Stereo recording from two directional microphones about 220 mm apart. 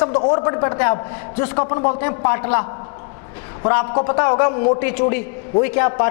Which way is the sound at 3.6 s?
25° left (ahead or behind).